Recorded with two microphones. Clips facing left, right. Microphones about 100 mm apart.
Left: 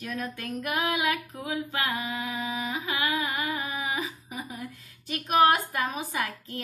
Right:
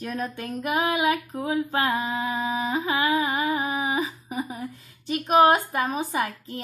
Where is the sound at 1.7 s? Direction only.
35° right (ahead or behind).